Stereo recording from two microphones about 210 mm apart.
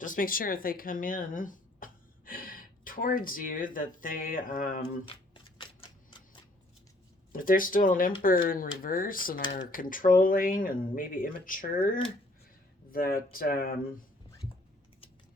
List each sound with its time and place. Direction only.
0.0 s speech: 40° left (ahead or behind)
5.0 s shuffling cards: 25° left (ahead or behind)
7.3 s speech: 40° left (ahead or behind)